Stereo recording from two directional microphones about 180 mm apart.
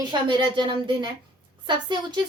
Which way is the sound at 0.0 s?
25° right (ahead or behind).